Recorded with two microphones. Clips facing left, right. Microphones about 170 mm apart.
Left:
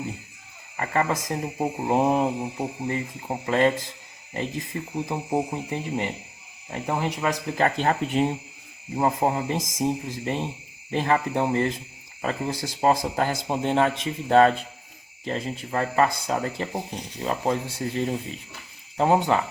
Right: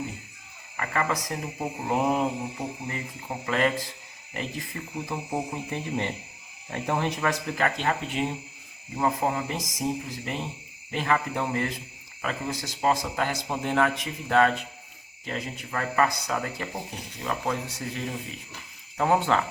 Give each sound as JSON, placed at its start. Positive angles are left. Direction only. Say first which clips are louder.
{"t": 0.8, "sound": "speech", "louder": "left 3 dB", "side_deg": 25}
{"t": 7.6, "sound": "speech", "louder": "left 5 dB", "side_deg": 40}
{"t": 18.9, "sound": "speech", "louder": "left 3 dB", "side_deg": 20}